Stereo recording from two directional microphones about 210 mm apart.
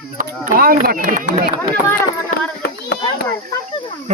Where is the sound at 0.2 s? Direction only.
40° right (ahead or behind).